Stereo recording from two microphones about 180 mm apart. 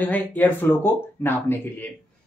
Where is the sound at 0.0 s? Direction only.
10° left (ahead or behind).